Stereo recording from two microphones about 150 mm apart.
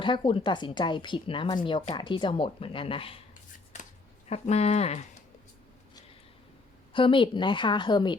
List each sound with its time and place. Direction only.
0.0 s speech: 35° left (ahead or behind)
4.3 s speech: 45° left (ahead or behind)
6.9 s speech: 35° left (ahead or behind)